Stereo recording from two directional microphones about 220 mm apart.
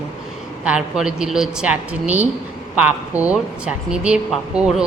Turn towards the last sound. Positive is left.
turn(degrees=0)  # may be behind; listen again after turning